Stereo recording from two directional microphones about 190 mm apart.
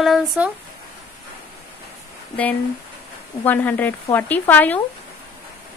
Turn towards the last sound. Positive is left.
turn(degrees=10)  # may be behind; listen again after turning